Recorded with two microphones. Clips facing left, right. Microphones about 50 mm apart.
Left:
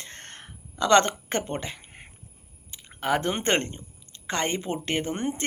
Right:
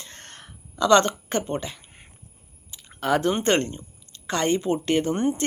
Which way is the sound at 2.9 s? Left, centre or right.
Left.